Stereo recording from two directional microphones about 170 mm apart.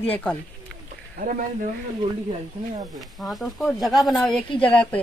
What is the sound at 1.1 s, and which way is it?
Speech, 55° right (ahead or behind).